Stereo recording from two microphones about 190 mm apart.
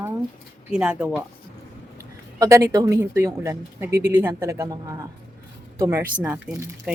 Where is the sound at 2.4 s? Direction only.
15° right (ahead or behind).